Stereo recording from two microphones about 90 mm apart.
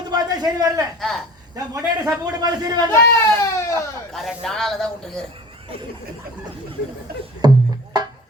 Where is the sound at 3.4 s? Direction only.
30° left (ahead or behind).